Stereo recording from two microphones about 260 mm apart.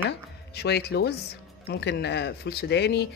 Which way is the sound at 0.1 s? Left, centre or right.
Left.